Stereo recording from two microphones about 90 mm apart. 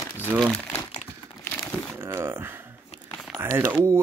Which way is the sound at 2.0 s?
25° right (ahead or behind).